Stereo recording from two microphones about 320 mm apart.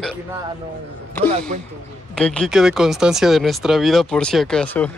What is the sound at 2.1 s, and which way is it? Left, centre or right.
Speech, centre.